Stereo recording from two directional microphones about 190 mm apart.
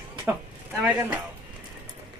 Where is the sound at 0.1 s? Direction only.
15° right (ahead or behind).